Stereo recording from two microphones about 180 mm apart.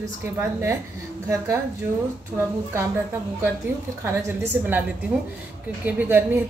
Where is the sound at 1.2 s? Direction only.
15° right (ahead or behind).